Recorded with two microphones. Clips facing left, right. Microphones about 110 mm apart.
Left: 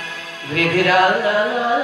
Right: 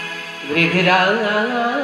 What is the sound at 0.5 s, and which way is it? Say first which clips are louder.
Speech: even; 50° right (ahead or behind).